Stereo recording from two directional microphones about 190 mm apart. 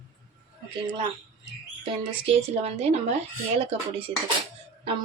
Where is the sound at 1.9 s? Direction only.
30° right (ahead or behind).